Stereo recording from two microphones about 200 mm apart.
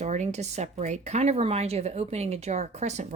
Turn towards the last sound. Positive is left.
turn(degrees=-35)  # may be behind; listen again after turning